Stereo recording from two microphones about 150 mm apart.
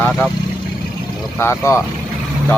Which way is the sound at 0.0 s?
5° left (ahead or behind).